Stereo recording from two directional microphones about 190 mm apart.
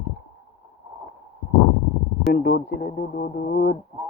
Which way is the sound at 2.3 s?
60° left (ahead or behind).